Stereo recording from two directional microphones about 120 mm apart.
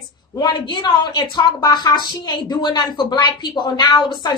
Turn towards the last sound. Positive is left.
turn(degrees=40)  # may be behind; listen again after turning